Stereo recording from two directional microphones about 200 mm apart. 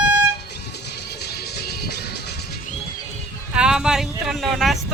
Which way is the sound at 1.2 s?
55° left (ahead or behind).